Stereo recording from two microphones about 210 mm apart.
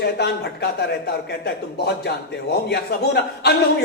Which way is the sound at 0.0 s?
50° left (ahead or behind).